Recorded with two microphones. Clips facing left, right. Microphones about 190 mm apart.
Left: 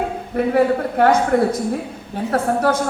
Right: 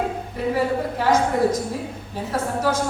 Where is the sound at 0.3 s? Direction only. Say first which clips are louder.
Left 6 dB; 60° left (ahead or behind).